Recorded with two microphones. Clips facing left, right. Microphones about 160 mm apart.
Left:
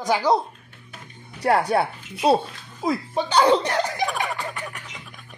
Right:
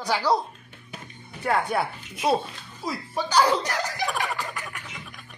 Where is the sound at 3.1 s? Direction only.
25° left (ahead or behind).